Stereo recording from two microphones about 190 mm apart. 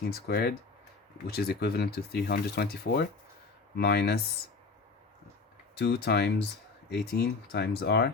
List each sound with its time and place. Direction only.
0.0 s speech: 55° left (ahead or behind)
5.7 s speech: 60° left (ahead or behind)